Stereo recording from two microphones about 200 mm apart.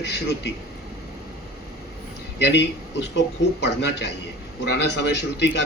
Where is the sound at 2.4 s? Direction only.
60° left (ahead or behind).